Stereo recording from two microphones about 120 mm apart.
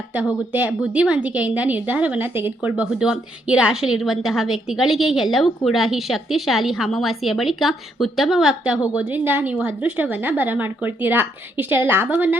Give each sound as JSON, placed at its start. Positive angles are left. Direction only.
{"t": 0.5, "sound": "a woman's voice", "side_deg": -10}